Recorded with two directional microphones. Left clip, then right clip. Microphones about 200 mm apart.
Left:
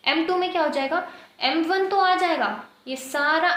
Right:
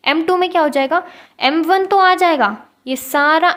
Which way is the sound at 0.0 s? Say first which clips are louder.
Right 7 dB; 55° right (ahead or behind).